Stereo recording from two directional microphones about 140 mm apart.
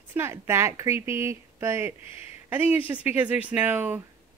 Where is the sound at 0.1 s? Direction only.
15° right (ahead or behind).